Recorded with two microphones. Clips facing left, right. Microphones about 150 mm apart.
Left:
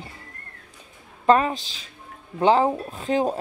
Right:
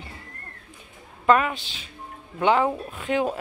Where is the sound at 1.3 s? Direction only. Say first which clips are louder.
Left 2 dB; 35° left (ahead or behind).